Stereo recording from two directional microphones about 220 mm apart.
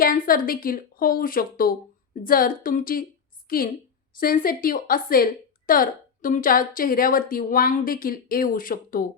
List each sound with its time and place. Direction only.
0.0 s a woman's voice: 40° left (ahead or behind)